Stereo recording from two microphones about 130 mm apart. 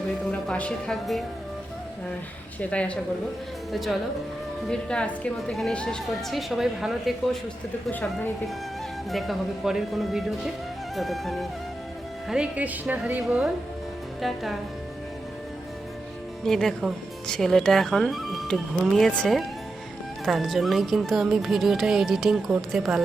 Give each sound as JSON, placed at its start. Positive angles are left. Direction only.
{"t": 0.3, "sound": "speech", "side_deg": 10}
{"t": 2.6, "sound": "a woman's voice", "side_deg": 10}
{"t": 7.9, "sound": "speech", "side_deg": 15}
{"t": 9.0, "sound": "speech", "side_deg": 0}
{"t": 16.4, "sound": "speech", "side_deg": 0}